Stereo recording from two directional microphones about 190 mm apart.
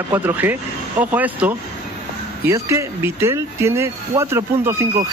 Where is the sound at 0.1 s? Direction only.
10° right (ahead or behind).